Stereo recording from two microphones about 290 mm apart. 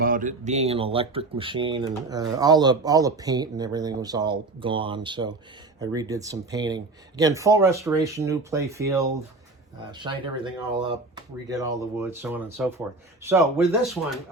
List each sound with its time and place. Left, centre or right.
0.0 s speech: right; by 14.0 s centre